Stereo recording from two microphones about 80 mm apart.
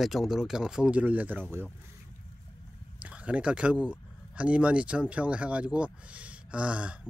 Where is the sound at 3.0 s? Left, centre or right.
Centre.